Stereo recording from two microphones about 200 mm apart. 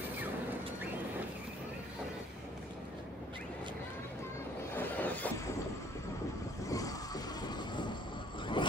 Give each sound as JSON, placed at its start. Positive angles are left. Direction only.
{"t": 4.7, "sound": "vehicle", "side_deg": 10}
{"t": 6.7, "sound": "vehicle", "side_deg": 15}
{"t": 7.4, "sound": "train", "side_deg": 20}
{"t": 8.6, "sound": "mechanisms", "side_deg": 25}